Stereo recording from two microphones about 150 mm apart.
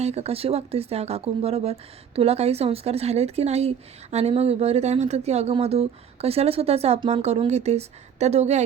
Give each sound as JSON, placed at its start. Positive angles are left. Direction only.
{"t": 0.0, "sound": "speech", "side_deg": -45}